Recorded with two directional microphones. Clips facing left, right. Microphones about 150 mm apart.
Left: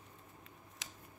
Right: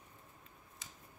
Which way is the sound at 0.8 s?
75° left (ahead or behind).